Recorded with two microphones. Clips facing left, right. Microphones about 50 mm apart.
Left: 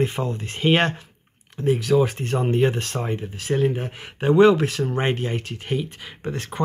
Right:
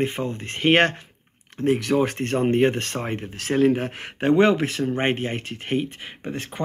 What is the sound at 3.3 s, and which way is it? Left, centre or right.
Speech, right.